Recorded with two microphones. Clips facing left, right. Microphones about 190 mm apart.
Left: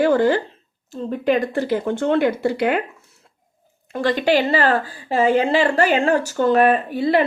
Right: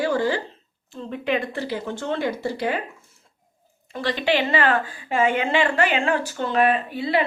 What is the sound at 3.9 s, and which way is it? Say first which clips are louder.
A woman's voice: left 5 dB; 45° left (ahead or behind).